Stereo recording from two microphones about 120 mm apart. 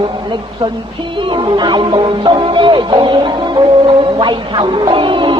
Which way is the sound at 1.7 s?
40° right (ahead or behind).